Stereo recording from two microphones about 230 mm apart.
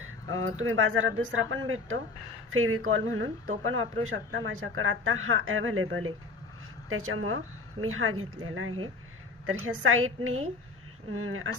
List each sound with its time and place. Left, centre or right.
0.3 s speech: right